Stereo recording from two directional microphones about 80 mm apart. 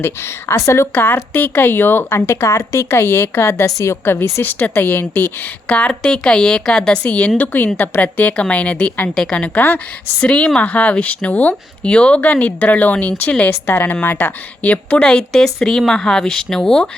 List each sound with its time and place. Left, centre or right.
0.0 s speech: left
0.9 s a woman's voice: left
13.5 s a woman's voice: left; by 16.9 s centre